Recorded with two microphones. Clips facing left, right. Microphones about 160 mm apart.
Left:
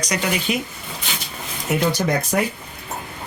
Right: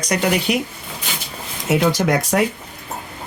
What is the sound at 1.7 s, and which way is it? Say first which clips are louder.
Speech: right 3 dB; 90° right.